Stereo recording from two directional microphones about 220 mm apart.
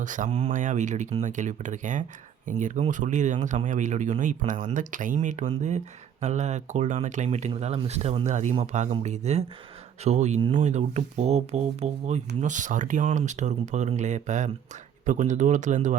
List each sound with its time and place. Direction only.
0.0 s speech: 35° right (ahead or behind)